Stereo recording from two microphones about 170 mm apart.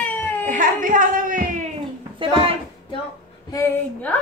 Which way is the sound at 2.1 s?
30° right (ahead or behind).